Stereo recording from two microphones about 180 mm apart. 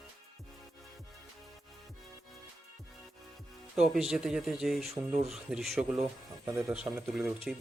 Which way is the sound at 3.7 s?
5° right (ahead or behind).